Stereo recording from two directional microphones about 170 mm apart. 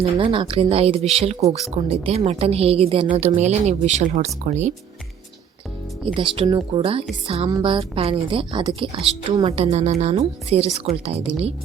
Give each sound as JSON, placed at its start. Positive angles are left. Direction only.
{"t": 0.0, "sound": "a woman's voice", "side_deg": -30}
{"t": 6.1, "sound": "a woman's voice", "side_deg": -30}